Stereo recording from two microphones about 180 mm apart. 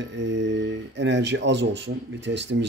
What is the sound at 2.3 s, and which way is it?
Speech, 90° right.